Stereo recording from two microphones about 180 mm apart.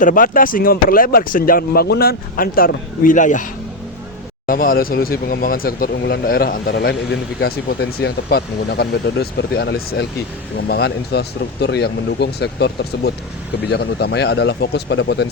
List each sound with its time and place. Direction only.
0.0 s speech: 50° left (ahead or behind)
4.4 s speech: 50° left (ahead or behind); by 15.3 s 70° left (ahead or behind)